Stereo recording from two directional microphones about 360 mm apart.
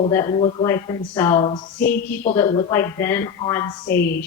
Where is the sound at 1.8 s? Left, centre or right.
Left.